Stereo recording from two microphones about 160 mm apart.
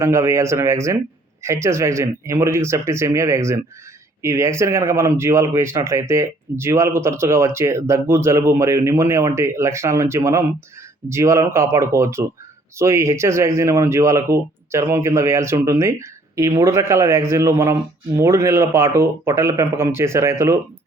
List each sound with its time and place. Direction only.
0.0 s speech: 20° right (ahead or behind)